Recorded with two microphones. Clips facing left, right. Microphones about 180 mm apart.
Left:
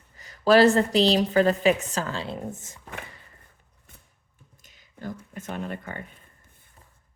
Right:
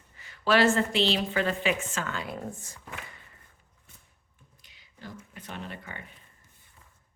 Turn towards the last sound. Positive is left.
turn(degrees=45)  # may be behind; listen again after turning